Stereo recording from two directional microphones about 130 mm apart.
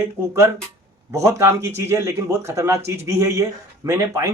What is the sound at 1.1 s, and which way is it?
Speech, 20° right (ahead or behind).